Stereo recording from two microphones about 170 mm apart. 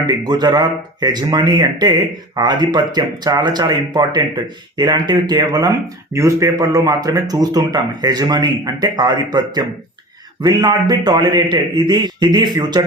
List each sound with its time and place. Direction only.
0.0 s speech: 25° right (ahead or behind)